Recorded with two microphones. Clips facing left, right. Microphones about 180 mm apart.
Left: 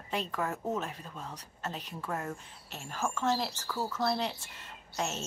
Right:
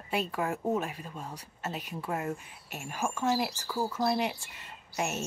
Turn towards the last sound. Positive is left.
turn(degrees=-10)  # may be behind; listen again after turning